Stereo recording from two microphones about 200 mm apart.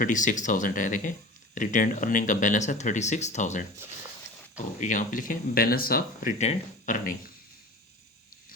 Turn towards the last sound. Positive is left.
turn(degrees=45)  # may be behind; listen again after turning